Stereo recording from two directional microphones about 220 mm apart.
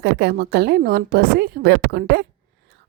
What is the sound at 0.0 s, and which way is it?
A woman's voice, 45° right (ahead or behind).